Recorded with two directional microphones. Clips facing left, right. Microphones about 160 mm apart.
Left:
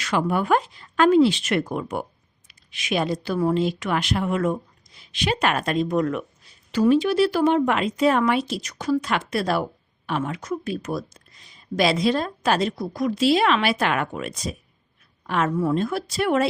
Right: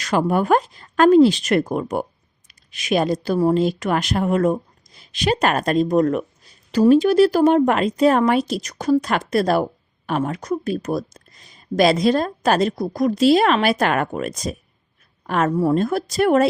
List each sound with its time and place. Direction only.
0.0 s speech: 40° right (ahead or behind)